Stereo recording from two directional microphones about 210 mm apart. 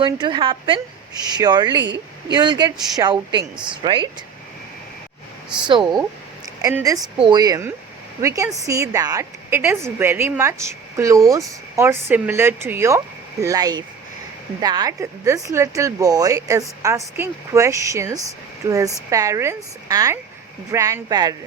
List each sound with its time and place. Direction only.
0.0 s a woman's voice: 20° right (ahead or behind)
5.6 s a woman's voice: 20° right (ahead or behind)